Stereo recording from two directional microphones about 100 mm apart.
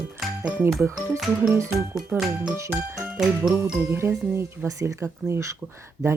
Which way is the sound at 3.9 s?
25° right (ahead or behind).